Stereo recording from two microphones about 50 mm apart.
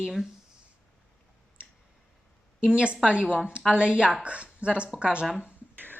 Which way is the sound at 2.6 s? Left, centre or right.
Right.